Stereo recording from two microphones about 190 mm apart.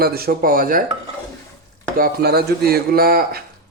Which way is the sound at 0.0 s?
55° right (ahead or behind).